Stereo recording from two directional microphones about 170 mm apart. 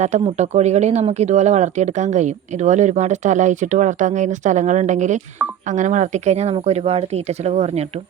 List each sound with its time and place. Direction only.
0.3 s speech: 40° right (ahead or behind)